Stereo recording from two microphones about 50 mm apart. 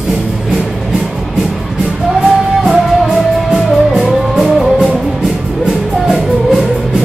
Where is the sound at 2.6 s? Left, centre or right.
Centre.